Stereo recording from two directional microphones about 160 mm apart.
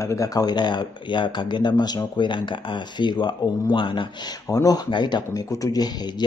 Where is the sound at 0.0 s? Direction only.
20° left (ahead or behind).